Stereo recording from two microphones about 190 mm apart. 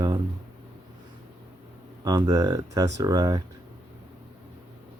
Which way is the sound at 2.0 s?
20° right (ahead or behind).